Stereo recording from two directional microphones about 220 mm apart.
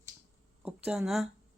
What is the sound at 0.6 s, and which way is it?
Speech, 5° right (ahead or behind).